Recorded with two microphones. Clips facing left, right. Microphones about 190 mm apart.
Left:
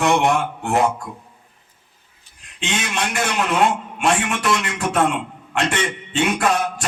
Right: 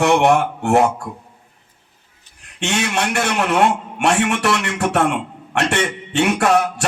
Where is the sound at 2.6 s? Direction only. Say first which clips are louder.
Right 4 dB; 70° right (ahead or behind).